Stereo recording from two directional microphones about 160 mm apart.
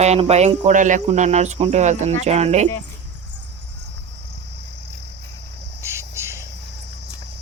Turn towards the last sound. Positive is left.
turn(degrees=-15)  # may be behind; listen again after turning